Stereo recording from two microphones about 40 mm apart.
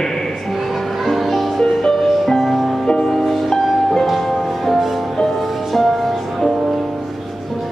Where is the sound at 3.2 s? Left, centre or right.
Centre.